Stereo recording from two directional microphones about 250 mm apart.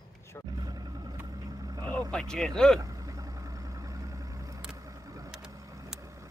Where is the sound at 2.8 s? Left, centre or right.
Centre.